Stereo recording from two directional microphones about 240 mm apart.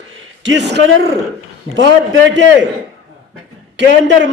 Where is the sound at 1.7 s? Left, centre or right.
Right.